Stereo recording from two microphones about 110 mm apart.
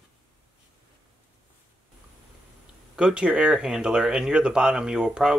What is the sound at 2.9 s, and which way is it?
Speech, 10° right (ahead or behind).